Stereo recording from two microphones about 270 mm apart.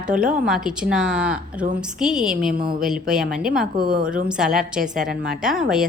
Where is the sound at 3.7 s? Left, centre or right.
Right.